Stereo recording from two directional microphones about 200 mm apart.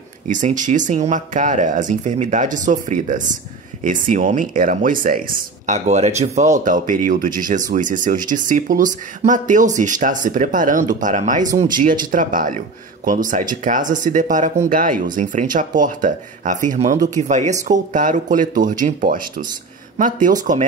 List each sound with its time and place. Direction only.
0.3 s speech: 40° right (ahead or behind)